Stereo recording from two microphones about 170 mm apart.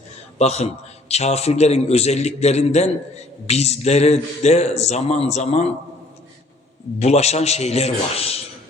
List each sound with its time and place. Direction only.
0.3 s a man's voice: 40° left (ahead or behind)
7.0 s a man's voice: 40° left (ahead or behind)